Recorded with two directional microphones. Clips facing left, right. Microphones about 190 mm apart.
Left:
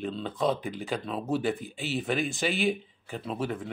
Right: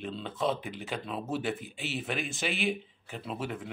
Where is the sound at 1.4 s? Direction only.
40° left (ahead or behind).